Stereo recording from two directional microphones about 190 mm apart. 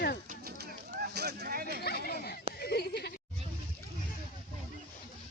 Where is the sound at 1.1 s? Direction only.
60° right (ahead or behind).